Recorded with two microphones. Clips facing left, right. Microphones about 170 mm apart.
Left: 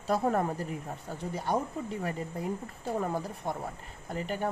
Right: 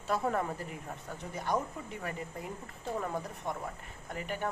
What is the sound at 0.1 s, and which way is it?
Speech, 35° left (ahead or behind).